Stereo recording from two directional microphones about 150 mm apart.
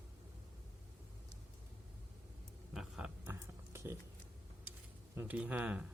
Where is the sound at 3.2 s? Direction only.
15° right (ahead or behind).